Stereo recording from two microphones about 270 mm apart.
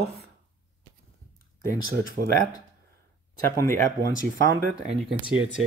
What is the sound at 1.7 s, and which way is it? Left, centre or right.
Speech, right.